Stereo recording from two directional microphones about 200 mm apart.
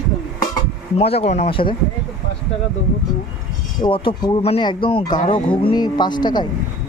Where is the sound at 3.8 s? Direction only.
25° left (ahead or behind).